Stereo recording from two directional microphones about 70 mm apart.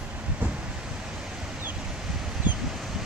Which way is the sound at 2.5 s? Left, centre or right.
Right.